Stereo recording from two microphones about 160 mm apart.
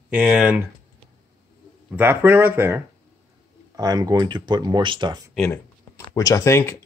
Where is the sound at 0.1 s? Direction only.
5° right (ahead or behind).